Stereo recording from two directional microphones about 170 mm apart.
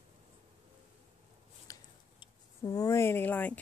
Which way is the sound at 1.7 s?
20° left (ahead or behind).